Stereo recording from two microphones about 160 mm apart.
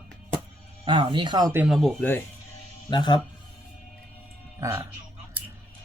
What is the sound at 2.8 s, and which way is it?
Speech, 25° left (ahead or behind).